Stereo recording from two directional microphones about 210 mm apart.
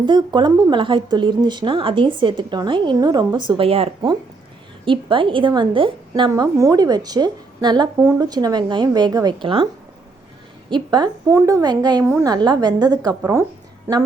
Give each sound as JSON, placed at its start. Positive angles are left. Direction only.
{"t": 0.0, "sound": "a woman's voice", "side_deg": -20}
{"t": 10.7, "sound": "a woman's voice", "side_deg": -20}